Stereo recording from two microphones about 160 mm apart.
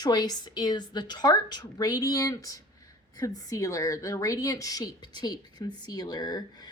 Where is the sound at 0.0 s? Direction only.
25° left (ahead or behind).